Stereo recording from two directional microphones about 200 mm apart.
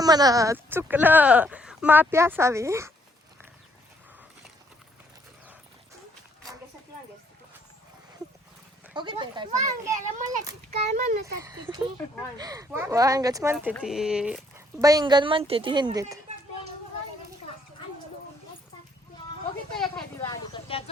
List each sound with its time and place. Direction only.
0.0 s speech: 20° right (ahead or behind)
9.0 s a woman's voice: 25° right (ahead or behind)
9.5 s a child's voice: 35° right (ahead or behind)
11.3 s speech: 15° right (ahead or behind)
14.8 s a woman's voice: 20° right (ahead or behind)
20.1 s a sound: 15° left (ahead or behind)
20.7 s speech: 30° left (ahead or behind)